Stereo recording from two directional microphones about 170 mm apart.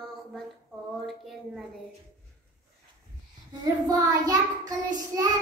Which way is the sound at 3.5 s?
20° right (ahead or behind).